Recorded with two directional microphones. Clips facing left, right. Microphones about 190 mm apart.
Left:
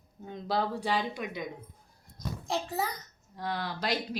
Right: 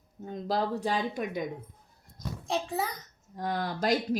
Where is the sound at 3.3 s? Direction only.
45° right (ahead or behind).